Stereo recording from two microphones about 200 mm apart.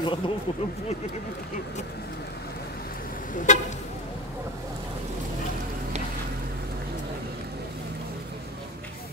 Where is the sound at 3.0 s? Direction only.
40° left (ahead or behind).